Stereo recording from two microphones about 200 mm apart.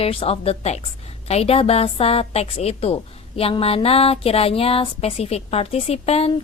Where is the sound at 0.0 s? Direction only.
30° left (ahead or behind).